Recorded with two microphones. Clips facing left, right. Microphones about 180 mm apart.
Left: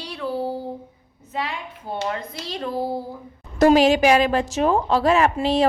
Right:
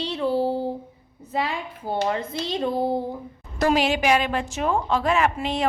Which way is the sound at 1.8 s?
25° right (ahead or behind).